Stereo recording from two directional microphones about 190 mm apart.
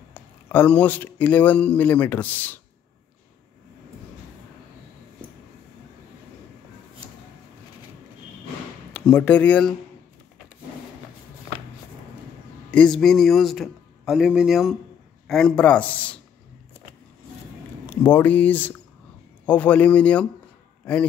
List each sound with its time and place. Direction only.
0.1 s a man's voice: 10° left (ahead or behind)
8.9 s a man's voice: 5° left (ahead or behind)
12.7 s a man's voice: 5° left (ahead or behind)
17.8 s a man's voice: 10° left (ahead or behind)